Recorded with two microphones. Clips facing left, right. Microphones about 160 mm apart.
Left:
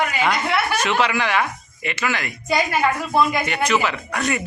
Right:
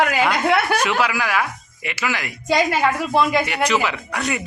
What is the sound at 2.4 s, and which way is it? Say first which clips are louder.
Speech: right 3 dB; 90° right.